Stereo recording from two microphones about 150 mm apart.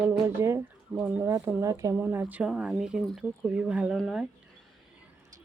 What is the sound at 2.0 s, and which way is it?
Speech, 10° right (ahead or behind).